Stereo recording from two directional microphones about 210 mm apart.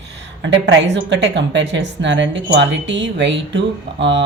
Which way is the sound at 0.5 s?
55° right (ahead or behind).